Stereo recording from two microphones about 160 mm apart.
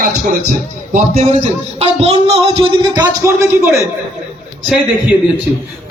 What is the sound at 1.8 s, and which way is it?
Speech, 40° right (ahead or behind).